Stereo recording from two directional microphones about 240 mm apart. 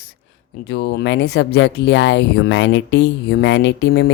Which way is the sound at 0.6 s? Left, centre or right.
Left.